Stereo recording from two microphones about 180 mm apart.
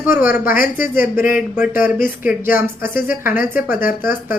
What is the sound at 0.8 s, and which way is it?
Speech, 10° right (ahead or behind).